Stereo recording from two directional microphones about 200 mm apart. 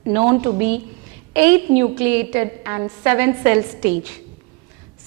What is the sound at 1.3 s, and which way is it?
A woman's voice, 10° right (ahead or behind).